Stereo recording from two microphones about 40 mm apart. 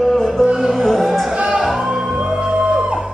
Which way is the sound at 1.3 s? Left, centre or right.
Right.